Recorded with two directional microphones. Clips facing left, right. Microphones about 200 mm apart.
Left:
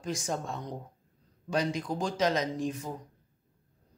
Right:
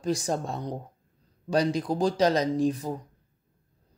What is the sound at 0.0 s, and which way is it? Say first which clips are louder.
A man's voice: right 6 dB; 35° right (ahead or behind).